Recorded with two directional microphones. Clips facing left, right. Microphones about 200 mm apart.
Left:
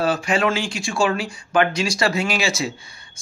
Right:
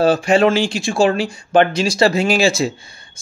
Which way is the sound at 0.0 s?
30° right (ahead or behind).